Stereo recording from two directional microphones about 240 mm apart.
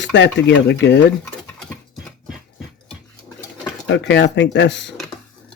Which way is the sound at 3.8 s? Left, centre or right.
Left.